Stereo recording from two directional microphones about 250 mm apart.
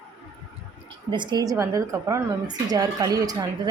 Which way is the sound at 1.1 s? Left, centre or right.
Centre.